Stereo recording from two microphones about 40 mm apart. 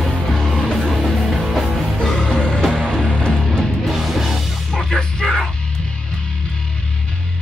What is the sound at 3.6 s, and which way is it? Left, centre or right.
Music, centre.